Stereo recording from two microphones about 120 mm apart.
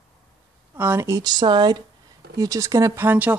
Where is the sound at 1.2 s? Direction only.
35° right (ahead or behind).